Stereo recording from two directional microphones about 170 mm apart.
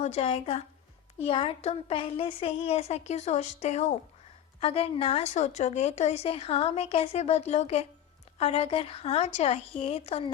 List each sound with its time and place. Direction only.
0.0 s a woman's voice: 40° left (ahead or behind)